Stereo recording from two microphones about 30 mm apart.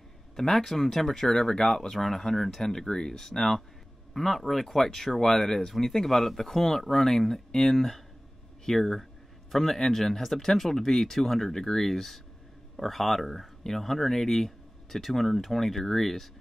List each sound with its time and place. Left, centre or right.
0.4 s speech: centre
1.3 s speech: centre
1.9 s speech: centre
2.9 s speech: centre
3.2 s speech: centre
8.7 s speech: centre
9.5 s speech: centre